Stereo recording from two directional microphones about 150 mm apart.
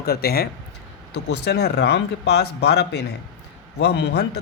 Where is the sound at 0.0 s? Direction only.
90° left.